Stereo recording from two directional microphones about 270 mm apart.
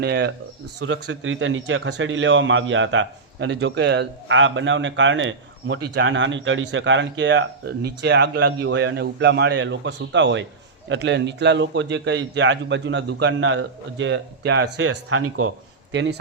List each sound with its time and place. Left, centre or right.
0.0 s a man's voice: right